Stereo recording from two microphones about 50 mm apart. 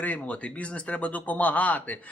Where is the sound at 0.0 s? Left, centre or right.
Left.